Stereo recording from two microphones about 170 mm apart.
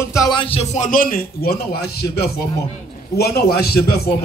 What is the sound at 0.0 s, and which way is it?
A man's voice, 20° left (ahead or behind).